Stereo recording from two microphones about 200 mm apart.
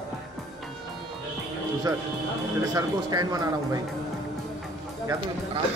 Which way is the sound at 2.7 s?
20° right (ahead or behind).